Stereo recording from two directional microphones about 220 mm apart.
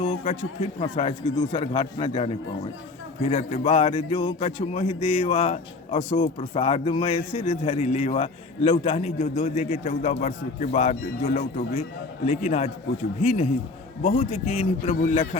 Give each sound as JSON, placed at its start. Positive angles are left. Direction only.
{"t": 0.0, "sound": "a sound", "side_deg": 30}
{"t": 0.8, "sound": "a man's voice", "side_deg": 25}
{"t": 14.0, "sound": "a man's voice", "side_deg": 30}